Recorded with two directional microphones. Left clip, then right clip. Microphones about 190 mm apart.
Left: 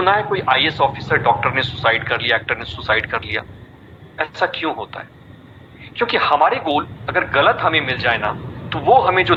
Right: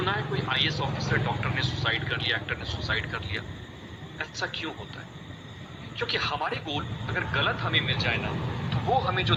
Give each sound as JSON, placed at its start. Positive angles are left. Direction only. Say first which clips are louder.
{"t": 0.0, "sound": "speech", "louder": "left 13 dB", "side_deg": 40}